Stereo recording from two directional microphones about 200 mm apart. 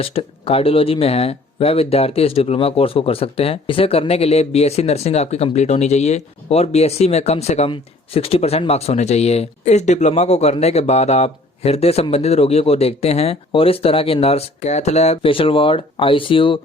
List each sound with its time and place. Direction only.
0.0 s speech: 30° left (ahead or behind)